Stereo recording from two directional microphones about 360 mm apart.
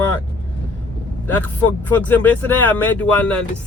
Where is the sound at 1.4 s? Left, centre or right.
Centre.